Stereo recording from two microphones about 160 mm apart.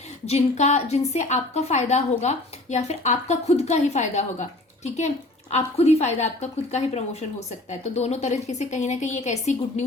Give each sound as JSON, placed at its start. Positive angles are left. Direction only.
{"t": 0.3, "sound": "a woman's voice", "side_deg": 45}